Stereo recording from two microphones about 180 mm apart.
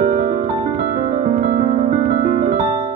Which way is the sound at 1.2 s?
50° right (ahead or behind).